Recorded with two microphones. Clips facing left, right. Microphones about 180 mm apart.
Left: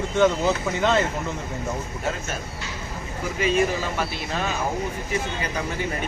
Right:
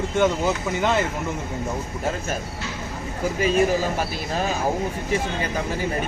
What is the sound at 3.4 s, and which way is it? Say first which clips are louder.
Speech: right 2 dB; 40° right (ahead or behind).